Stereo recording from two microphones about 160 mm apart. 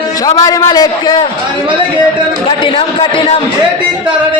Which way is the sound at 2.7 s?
30° left (ahead or behind).